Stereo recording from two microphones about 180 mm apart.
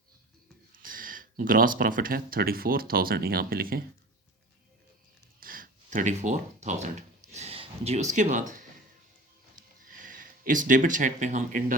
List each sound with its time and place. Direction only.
0.7 s speech: 50° right (ahead or behind)
5.4 s speech: 50° right (ahead or behind)
9.9 s speech: 50° right (ahead or behind)